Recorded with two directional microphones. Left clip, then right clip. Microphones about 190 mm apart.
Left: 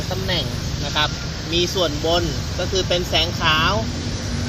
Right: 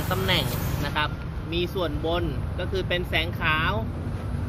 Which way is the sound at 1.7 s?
15° right (ahead or behind).